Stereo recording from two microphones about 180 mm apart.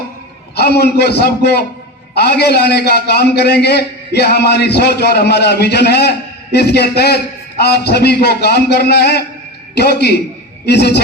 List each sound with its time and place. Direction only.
0.5 s a man's voice: 65° left (ahead or behind)